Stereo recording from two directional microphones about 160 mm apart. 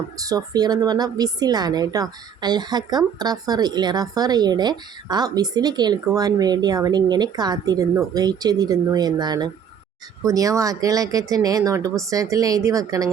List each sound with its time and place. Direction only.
0.2 s speech: 25° right (ahead or behind)